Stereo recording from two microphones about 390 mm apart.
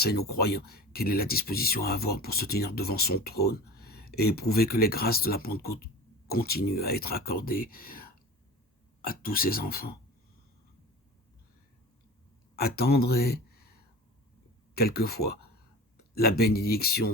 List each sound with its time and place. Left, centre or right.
0.0 s speech: left
9.0 s speech: left
12.5 s speech: left
14.8 s speech: left